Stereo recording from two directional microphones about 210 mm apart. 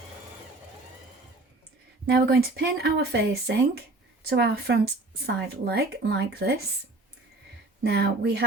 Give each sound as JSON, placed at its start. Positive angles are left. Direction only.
{"t": 2.0, "sound": "speech", "side_deg": -50}
{"t": 7.9, "sound": "speech", "side_deg": -50}